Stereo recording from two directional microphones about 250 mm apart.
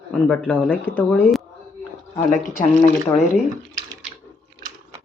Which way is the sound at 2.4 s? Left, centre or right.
Left.